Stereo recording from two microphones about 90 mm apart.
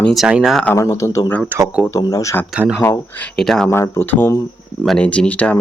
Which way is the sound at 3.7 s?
25° left (ahead or behind).